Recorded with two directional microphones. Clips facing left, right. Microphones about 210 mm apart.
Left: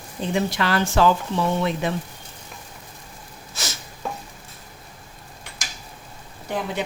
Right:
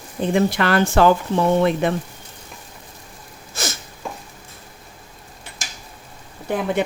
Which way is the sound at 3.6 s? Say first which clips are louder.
Right 6 dB; 50° right (ahead or behind).